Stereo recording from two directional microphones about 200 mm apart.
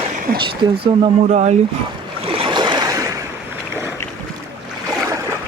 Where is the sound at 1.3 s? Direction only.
35° right (ahead or behind).